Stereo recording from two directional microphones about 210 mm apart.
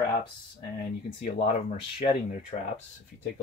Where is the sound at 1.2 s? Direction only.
30° left (ahead or behind).